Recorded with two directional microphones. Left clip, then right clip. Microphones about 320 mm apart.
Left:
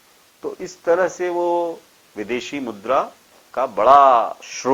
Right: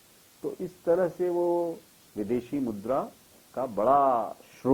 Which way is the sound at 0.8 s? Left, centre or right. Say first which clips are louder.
Left 7 dB; centre.